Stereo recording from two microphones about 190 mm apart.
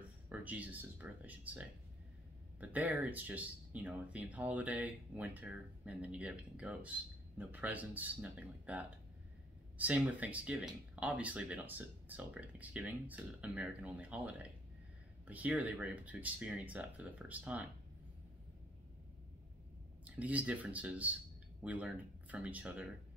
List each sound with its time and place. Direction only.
0.3 s speech: 10° right (ahead or behind)
20.1 s speech: 5° right (ahead or behind)